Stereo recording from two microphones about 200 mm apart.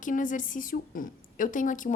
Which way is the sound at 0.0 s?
40° left (ahead or behind).